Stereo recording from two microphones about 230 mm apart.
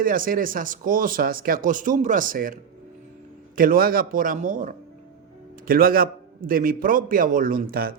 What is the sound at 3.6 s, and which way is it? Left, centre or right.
A man's voice, right.